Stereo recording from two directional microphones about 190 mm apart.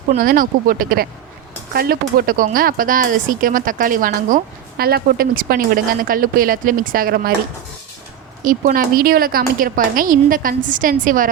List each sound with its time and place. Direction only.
0.2 s a woman's voice: 45° right (ahead or behind)
8.4 s a woman's voice: 45° right (ahead or behind)